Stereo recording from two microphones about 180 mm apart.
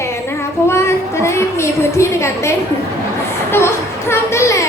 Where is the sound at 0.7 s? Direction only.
15° left (ahead or behind).